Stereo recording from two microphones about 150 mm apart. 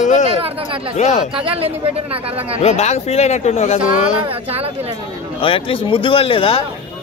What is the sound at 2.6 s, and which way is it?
Speech, 45° left (ahead or behind).